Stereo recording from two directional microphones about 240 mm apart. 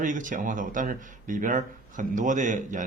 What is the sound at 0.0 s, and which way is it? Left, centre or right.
Speech, right.